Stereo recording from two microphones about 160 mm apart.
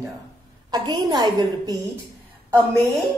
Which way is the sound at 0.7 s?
25° right (ahead or behind).